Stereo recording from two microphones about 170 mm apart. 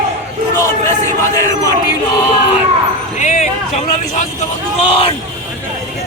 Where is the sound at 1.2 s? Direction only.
20° left (ahead or behind).